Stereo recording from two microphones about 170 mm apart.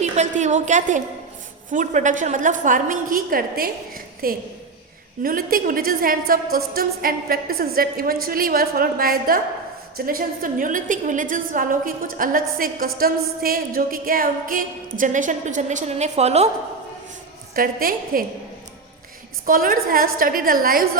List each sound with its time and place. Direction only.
0.0 s a woman's voice: 45° right (ahead or behind)
17.5 s a woman's voice: 55° right (ahead or behind)
19.5 s a woman's voice: 55° right (ahead or behind)